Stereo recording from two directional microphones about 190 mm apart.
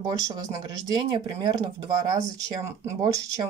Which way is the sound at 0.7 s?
20° right (ahead or behind).